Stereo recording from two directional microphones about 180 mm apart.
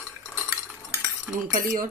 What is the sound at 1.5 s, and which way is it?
Speech, 45° right (ahead or behind).